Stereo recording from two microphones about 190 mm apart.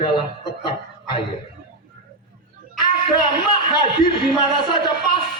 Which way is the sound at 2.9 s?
25° left (ahead or behind).